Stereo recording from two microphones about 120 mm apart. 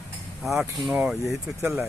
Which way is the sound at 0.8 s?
5° right (ahead or behind).